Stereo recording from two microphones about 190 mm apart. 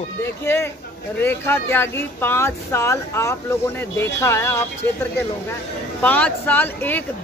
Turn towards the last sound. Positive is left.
turn(degrees=10)  # may be behind; listen again after turning